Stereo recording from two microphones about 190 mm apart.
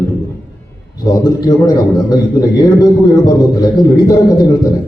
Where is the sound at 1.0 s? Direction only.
20° left (ahead or behind).